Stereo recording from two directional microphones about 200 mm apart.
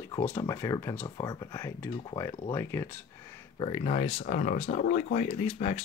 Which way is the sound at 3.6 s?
30° left (ahead or behind).